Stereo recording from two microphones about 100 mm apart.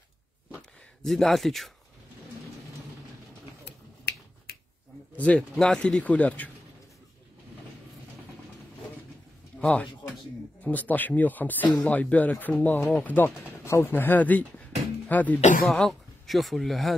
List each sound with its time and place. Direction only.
1.0 s speech: centre (ahead or behind)
5.1 s speech: 15° left (ahead or behind)
9.6 s speech: 15° left (ahead or behind)
15.8 s speech: centre (ahead or behind)